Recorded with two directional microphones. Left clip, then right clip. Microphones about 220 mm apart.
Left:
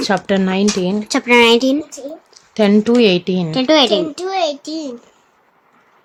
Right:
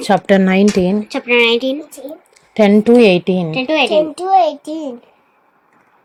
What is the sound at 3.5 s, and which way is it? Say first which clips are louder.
Speech: left 4 dB; 30° left (ahead or behind).